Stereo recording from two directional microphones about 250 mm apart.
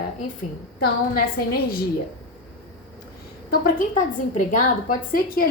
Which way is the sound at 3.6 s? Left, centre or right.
Left.